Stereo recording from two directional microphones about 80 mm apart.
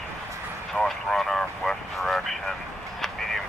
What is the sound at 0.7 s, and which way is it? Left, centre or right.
Vehicle, centre.